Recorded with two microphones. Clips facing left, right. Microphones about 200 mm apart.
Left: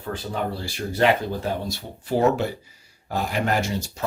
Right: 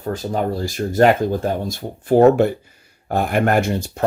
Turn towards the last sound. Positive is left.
turn(degrees=-55)  # may be behind; listen again after turning